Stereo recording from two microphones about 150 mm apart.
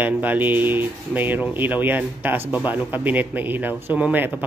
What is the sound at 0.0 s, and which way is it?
Speech, 10° right (ahead or behind).